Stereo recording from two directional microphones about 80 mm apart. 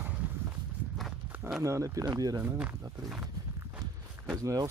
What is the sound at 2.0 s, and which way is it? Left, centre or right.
Speech, right.